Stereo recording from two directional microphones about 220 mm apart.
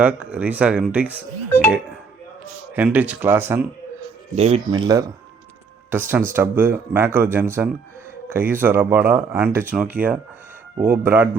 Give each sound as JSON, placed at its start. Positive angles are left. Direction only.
{"t": 0.0, "sound": "speech", "side_deg": -5}
{"t": 2.7, "sound": "speech", "side_deg": -5}
{"t": 4.4, "sound": "speech", "side_deg": -30}